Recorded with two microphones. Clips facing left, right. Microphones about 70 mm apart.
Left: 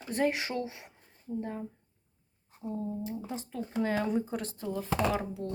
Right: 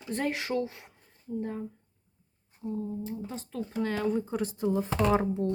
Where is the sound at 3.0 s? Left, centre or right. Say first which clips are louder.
Even; centre.